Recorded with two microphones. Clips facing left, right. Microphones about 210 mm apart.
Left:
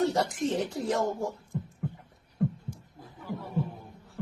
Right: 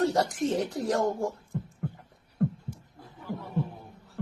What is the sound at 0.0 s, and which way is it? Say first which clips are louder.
Speech: right 1 dB; centre (ahead or behind).